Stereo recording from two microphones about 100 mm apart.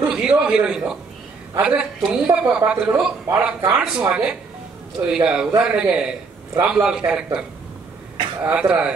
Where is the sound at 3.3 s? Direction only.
35° right (ahead or behind).